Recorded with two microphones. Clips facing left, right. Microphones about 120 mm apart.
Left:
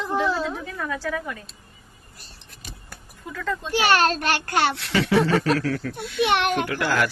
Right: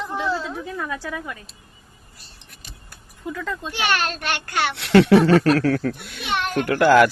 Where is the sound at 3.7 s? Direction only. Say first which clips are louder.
Left 5 dB; 40° left (ahead or behind).